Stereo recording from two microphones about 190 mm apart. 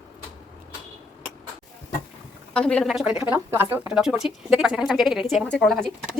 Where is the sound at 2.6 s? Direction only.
5° left (ahead or behind).